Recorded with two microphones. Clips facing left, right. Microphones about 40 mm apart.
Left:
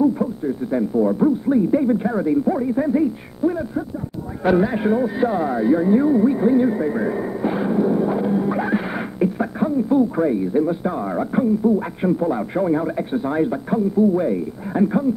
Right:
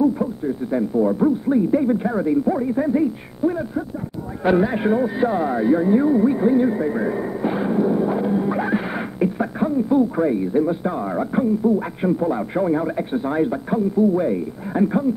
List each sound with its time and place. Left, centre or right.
0.0 s speech: centre